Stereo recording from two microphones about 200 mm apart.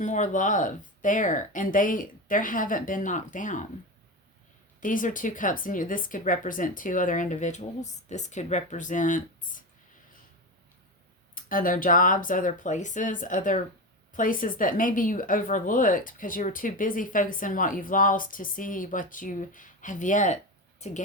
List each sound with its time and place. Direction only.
0.0 s a woman's voice: 40° left (ahead or behind)
4.8 s a woman's voice: 40° left (ahead or behind)
11.3 s a woman's voice: 45° left (ahead or behind)